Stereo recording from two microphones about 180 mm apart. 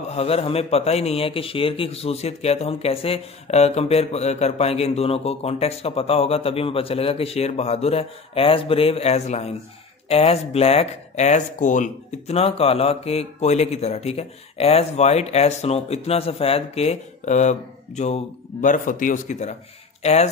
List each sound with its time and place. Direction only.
0.1 s speech: 35° left (ahead or behind)